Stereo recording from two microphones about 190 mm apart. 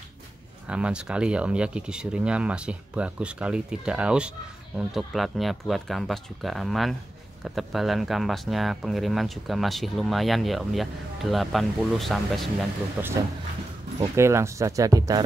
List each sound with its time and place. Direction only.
0.7 s speech: 5° right (ahead or behind)
13.0 s speech: 10° right (ahead or behind)